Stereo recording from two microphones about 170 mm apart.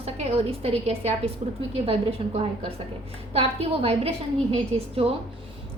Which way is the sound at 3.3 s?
35° right (ahead or behind).